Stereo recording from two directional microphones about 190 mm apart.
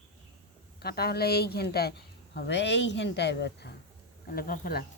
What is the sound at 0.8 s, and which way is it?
A woman's voice, 55° left (ahead or behind).